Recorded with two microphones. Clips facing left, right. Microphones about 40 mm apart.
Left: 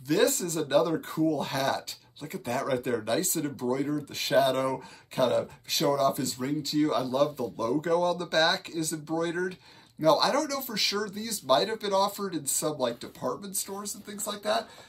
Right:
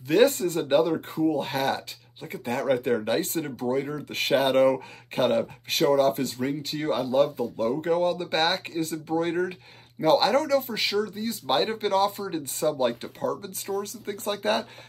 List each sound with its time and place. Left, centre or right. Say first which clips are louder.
0.1 s speech: right 5 dB; right